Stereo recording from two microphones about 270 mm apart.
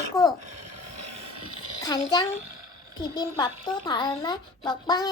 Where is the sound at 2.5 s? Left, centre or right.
Right.